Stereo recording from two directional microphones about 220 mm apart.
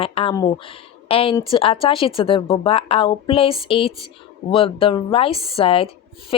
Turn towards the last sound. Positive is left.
turn(degrees=25)  # may be behind; listen again after turning